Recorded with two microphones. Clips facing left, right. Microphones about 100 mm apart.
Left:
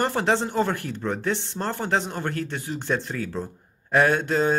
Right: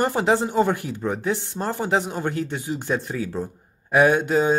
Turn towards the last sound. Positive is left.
turn(degrees=-15)  # may be behind; listen again after turning